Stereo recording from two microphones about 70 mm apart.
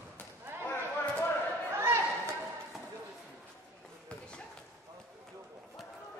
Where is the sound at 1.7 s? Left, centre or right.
Right.